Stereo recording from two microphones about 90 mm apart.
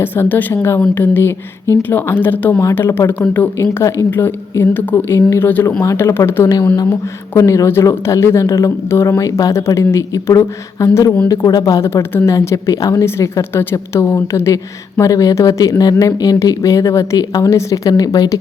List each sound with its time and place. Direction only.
0.0 s a woman's voice: 20° left (ahead or behind)
3.6 s a woman's voice: 30° left (ahead or behind)
11.8 s speech: 30° left (ahead or behind)